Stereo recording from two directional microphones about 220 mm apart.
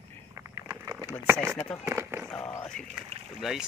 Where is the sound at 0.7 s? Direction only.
10° right (ahead or behind).